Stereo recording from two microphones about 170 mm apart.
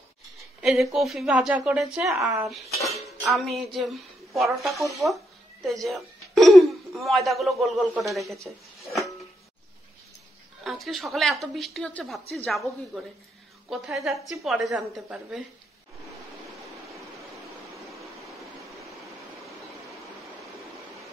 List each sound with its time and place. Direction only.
0.6 s speech: centre (ahead or behind)
2.0 s speech: 15° right (ahead or behind)
2.5 s speech: centre (ahead or behind)
3.0 s music: centre (ahead or behind)
4.7 s speech: centre (ahead or behind)
10.6 s speech: centre (ahead or behind)
18.2 s a sound: centre (ahead or behind)
19.4 s stream: centre (ahead or behind)